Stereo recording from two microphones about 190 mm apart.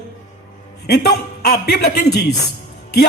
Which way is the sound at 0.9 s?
60° left (ahead or behind).